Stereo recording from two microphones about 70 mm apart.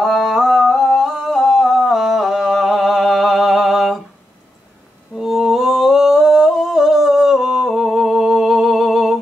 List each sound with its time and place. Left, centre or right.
0.0 s humming: centre
5.1 s humming: centre